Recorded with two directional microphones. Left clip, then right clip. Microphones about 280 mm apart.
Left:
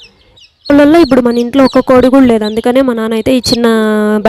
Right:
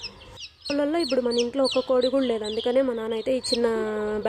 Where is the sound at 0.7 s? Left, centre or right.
Left.